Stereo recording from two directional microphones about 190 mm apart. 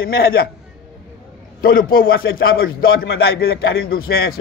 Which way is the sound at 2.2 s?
90° left.